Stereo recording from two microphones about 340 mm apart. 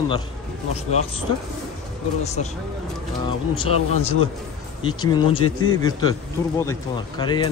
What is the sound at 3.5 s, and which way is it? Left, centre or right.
Speech, centre.